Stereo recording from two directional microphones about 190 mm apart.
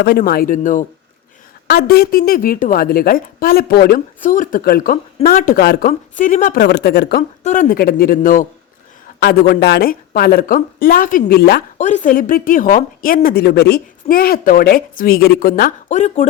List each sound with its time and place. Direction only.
0.0 s a woman's voice: 55° left (ahead or behind)
1.6 s a woman's voice: 55° left (ahead or behind)
7.4 s a woman's voice: 40° left (ahead or behind); by 11.6 s 55° left (ahead or behind)
11.8 s a woman's voice: 40° left (ahead or behind)